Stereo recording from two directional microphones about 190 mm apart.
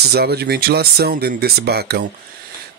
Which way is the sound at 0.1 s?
55° right (ahead or behind).